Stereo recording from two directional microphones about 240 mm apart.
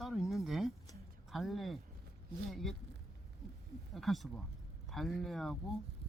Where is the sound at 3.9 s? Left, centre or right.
Centre.